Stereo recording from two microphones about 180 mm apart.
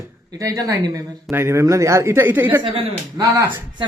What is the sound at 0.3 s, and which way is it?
Speech, 20° right (ahead or behind).